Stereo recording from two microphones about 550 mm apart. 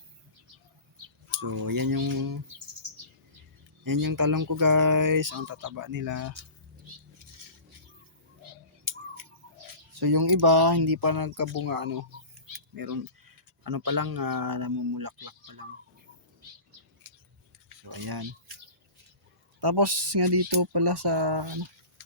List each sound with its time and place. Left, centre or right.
0.9 s speech: right
3.8 s speech: right
10.0 s speech: right
17.8 s speech: right
19.5 s speech: right